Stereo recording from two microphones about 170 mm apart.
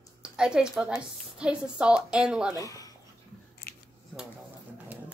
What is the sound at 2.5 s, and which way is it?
Speech, 20° left (ahead or behind).